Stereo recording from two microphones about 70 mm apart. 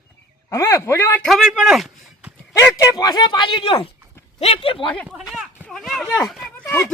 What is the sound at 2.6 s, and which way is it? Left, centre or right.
Speech, left.